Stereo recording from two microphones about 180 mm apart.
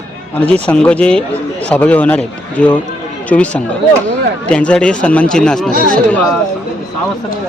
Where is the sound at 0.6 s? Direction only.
5° left (ahead or behind).